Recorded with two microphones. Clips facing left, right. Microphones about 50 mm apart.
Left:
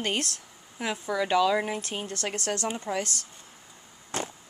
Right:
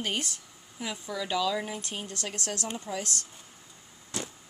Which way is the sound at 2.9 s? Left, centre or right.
Left.